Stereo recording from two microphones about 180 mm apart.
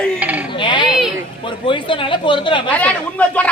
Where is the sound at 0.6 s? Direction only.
25° left (ahead or behind).